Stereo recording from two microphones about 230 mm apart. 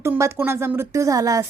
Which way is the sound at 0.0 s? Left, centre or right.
Centre.